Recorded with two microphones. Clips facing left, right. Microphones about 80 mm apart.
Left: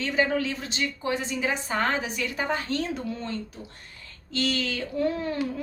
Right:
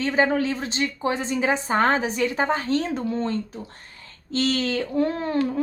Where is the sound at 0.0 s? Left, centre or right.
Right.